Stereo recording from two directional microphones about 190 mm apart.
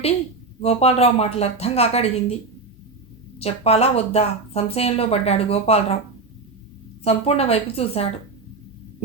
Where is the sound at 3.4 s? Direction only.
30° left (ahead or behind).